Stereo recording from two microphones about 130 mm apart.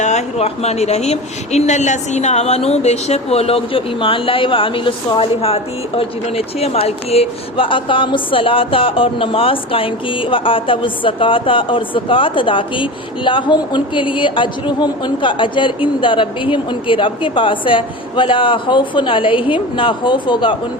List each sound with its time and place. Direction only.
0.0 s speech: 60° left (ahead or behind); by 20.6 s 40° left (ahead or behind)